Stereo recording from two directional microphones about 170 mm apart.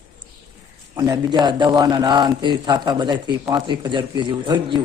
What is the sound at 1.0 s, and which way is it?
A man's voice, 20° right (ahead or behind).